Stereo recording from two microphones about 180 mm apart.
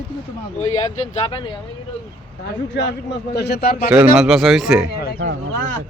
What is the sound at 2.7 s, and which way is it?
A man's voice, 65° left (ahead or behind).